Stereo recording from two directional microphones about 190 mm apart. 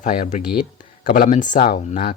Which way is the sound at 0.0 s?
45° left (ahead or behind).